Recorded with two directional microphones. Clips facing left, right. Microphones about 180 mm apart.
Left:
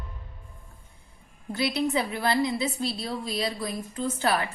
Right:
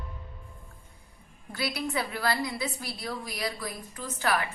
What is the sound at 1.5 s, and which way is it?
A woman's voice, 25° left (ahead or behind).